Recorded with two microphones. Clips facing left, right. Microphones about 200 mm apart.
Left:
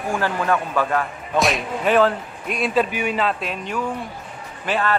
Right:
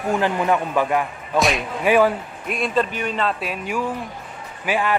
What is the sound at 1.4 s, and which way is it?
Speech, centre (ahead or behind).